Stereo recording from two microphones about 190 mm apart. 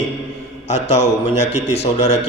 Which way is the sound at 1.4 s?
65° left (ahead or behind).